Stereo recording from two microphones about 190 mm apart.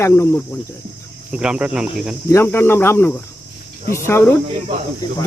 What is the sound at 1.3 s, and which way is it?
Speech, 5° right (ahead or behind).